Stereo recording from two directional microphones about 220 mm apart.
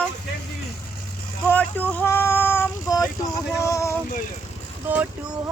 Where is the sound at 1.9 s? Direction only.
10° left (ahead or behind).